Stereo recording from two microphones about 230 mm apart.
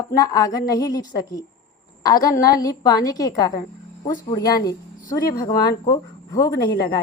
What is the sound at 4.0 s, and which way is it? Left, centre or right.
Speech, left.